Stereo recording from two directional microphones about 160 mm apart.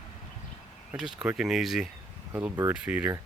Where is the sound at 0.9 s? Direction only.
5° right (ahead or behind).